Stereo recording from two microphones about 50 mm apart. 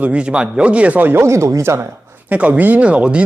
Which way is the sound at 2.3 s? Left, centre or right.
Right.